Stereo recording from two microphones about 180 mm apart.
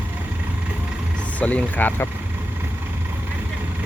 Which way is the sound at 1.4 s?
10° left (ahead or behind).